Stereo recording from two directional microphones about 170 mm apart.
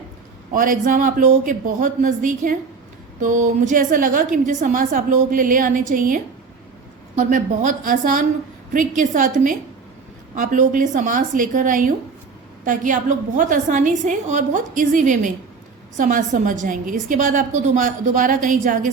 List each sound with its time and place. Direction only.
0.5 s a woman's voice: 55° right (ahead or behind)
7.2 s a woman's voice: 50° right (ahead or behind)